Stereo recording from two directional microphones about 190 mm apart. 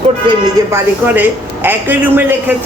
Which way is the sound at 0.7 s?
10° right (ahead or behind).